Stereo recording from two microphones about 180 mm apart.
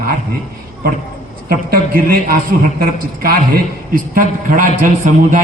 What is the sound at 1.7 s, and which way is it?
Speech, 55° right (ahead or behind).